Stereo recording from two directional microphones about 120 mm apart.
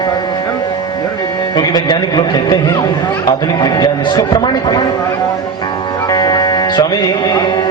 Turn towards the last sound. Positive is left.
turn(degrees=40)  # may be behind; listen again after turning